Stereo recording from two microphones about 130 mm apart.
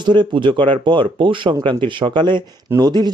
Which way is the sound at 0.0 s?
35° right (ahead or behind).